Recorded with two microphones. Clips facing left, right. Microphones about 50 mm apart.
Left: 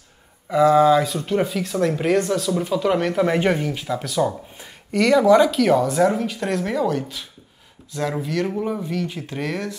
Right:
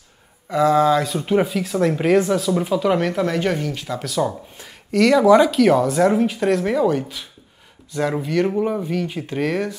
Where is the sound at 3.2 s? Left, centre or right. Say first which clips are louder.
Left 2 dB; centre.